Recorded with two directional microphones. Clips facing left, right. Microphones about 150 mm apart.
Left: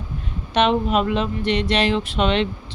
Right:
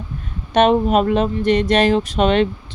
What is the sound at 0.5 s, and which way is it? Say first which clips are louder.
Speech: right 4 dB; 45° right (ahead or behind).